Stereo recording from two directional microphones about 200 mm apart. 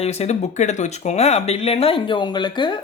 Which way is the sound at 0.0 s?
35° left (ahead or behind).